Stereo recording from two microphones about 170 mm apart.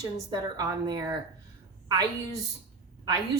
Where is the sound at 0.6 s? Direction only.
20° right (ahead or behind).